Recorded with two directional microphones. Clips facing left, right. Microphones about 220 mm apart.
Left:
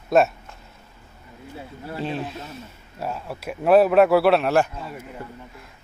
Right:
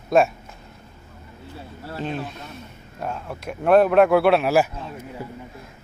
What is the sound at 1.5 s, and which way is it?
Speech, 15° left (ahead or behind).